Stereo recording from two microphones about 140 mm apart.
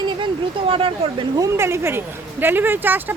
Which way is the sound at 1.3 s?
20° right (ahead or behind).